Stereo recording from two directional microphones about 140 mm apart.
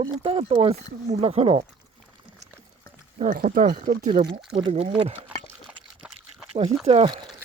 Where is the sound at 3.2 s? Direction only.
80° right.